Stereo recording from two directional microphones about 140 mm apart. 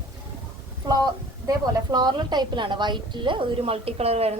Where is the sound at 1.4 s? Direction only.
30° right (ahead or behind).